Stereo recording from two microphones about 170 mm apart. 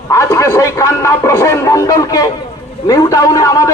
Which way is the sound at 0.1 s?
20° left (ahead or behind).